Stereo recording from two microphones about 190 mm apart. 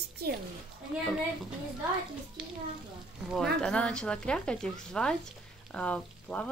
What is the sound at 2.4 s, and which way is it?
Speech, 5° right (ahead or behind).